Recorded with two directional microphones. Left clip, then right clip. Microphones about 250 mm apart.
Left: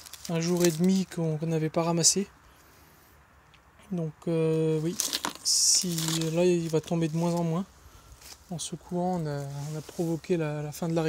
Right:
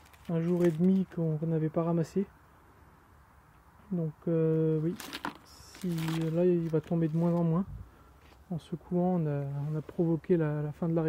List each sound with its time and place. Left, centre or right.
0.3 s speech: left
3.9 s speech: centre